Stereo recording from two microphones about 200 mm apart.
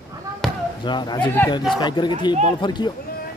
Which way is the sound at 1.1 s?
10° left (ahead or behind).